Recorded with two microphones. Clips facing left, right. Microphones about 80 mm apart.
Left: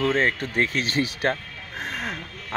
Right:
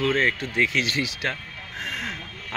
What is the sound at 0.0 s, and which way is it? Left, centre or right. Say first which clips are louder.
Speech: left 1 dB; left.